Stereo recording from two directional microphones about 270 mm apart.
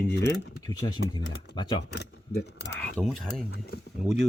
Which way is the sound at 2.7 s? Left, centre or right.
Centre.